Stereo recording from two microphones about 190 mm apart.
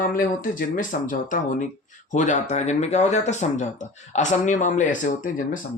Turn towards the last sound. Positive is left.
turn(degrees=40)  # may be behind; listen again after turning